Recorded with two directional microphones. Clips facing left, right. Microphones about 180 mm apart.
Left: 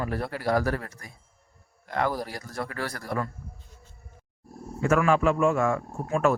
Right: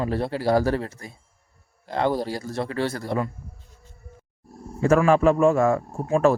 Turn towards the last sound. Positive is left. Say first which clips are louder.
# right 5 dB
turn(degrees=-30)  # may be behind; listen again after turning